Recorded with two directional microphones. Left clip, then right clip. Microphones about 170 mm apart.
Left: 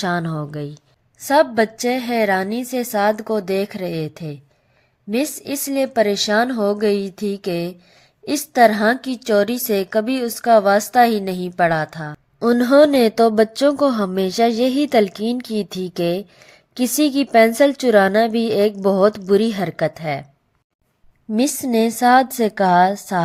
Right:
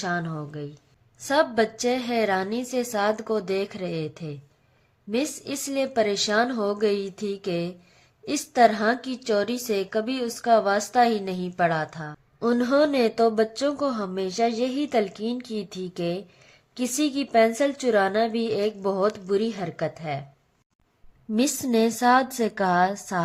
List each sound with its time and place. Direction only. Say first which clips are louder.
0.0 s a woman's voice: left 6 dB; 45° left (ahead or behind)
21.3 s a woman's voice: left 5 dB; 25° left (ahead or behind)